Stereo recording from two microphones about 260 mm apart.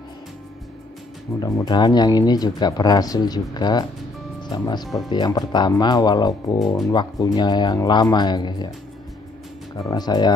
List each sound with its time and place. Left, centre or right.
1.4 s speech: centre
9.8 s speech: centre